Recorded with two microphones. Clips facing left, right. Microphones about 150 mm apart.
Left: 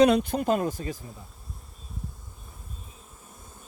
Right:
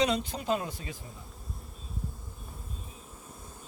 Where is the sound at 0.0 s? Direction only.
55° left (ahead or behind).